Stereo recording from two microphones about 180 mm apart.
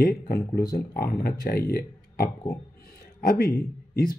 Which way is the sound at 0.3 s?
55° left (ahead or behind).